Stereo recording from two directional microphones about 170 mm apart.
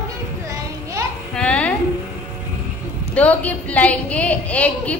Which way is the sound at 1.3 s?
5° left (ahead or behind).